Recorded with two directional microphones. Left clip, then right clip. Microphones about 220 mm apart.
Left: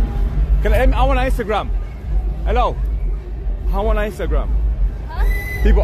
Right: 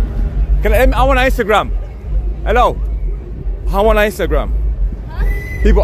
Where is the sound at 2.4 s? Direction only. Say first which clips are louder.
Right 7 dB; 30° right (ahead or behind).